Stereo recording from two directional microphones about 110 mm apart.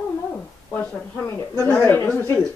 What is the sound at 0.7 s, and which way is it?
Speech, 20° left (ahead or behind).